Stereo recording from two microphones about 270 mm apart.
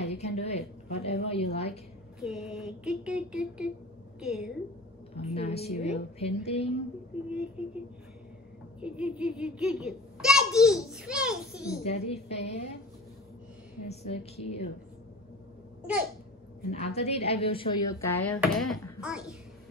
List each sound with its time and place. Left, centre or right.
0.0 s a woman's voice: left
2.1 s a child's voice: centre
5.1 s a woman's voice: left
7.2 s a child's voice: centre
8.8 s a child's voice: centre
11.8 s a woman's voice: left
13.8 s a woman's voice: left
16.7 s a woman's voice: left
17.9 s a child's voice: centre